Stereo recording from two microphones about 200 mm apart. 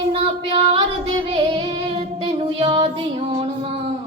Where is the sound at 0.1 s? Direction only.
30° right (ahead or behind).